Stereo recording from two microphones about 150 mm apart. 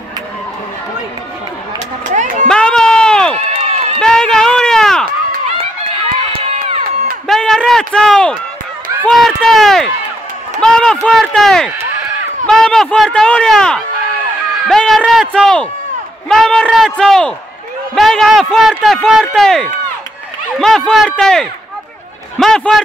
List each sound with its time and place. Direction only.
2.4 s run: 5° left (ahead or behind)
3.3 s run: 45° right (ahead or behind)
4.0 s a sound: 5° left (ahead or behind)
7.2 s run: centre (ahead or behind)
9.0 s speech: centre (ahead or behind)
10.6 s run: 5° left (ahead or behind)
11.1 s speech: centre (ahead or behind)